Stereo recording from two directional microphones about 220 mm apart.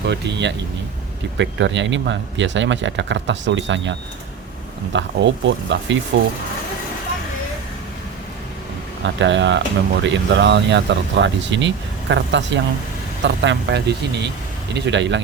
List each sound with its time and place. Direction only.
0.0 s speech: 50° right (ahead or behind)
9.2 s speech: 55° right (ahead or behind)